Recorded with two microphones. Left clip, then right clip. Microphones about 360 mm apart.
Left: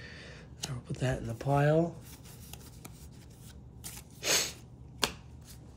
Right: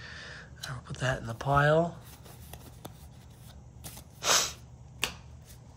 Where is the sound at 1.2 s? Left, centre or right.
Centre.